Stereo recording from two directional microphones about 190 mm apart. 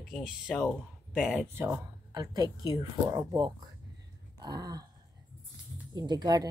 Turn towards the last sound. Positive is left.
turn(degrees=-20)  # may be behind; listen again after turning